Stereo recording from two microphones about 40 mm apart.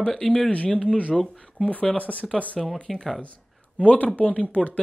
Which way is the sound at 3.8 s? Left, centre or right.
Left.